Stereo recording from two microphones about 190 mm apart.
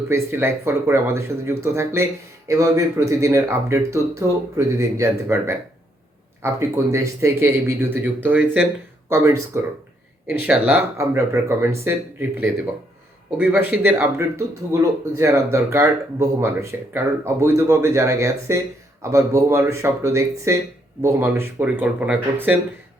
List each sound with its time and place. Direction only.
0.1 s speech: 10° right (ahead or behind)
13.3 s speech: 10° right (ahead or behind)